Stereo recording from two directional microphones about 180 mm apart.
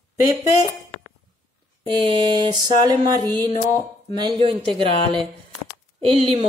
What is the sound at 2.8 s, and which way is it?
Speech, 25° right (ahead or behind).